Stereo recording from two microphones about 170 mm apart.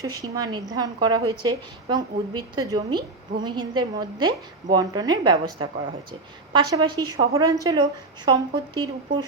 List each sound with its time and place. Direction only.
0.0 s a woman's voice: 20° right (ahead or behind)